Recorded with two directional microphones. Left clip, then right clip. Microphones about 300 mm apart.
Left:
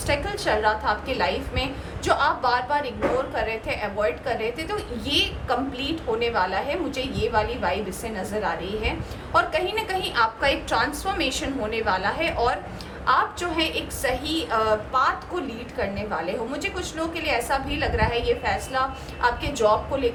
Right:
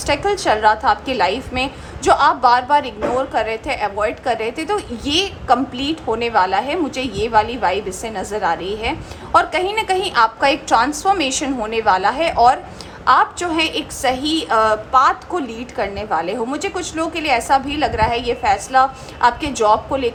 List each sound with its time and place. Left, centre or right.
0.0 s a woman's voice: centre